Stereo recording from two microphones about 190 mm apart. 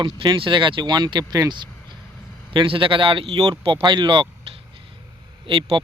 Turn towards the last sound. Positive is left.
turn(degrees=-25)  # may be behind; listen again after turning